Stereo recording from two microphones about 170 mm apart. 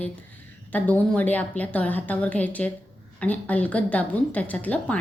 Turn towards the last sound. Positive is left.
turn(degrees=10)  # may be behind; listen again after turning